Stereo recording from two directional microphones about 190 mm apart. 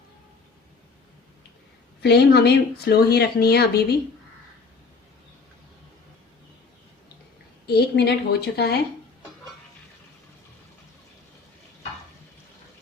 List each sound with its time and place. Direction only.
2.0 s speech: 60° left (ahead or behind)
7.7 s speech: 60° left (ahead or behind)